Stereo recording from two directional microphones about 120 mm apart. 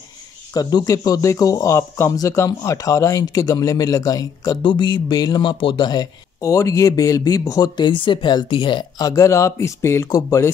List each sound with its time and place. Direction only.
0.6 s speech: 30° left (ahead or behind)